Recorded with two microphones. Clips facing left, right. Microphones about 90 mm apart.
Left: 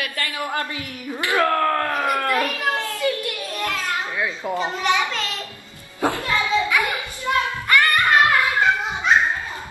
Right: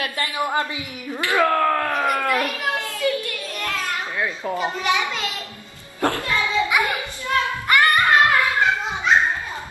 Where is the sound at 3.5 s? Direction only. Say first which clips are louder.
Left 1 dB; 20° left (ahead or behind).